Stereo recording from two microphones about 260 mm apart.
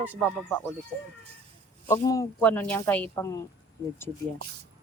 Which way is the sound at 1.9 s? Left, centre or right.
Centre.